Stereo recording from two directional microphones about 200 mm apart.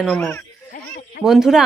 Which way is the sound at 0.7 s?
55° left (ahead or behind).